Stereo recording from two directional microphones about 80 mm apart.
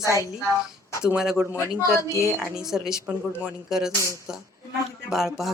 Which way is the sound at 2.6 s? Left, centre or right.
Centre.